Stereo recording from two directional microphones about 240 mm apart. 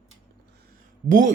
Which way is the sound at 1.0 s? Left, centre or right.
Right.